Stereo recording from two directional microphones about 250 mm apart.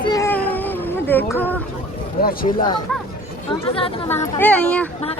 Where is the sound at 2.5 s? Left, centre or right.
Centre.